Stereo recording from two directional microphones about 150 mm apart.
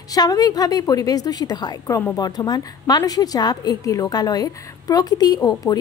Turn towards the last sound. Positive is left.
turn(degrees=25)  # may be behind; listen again after turning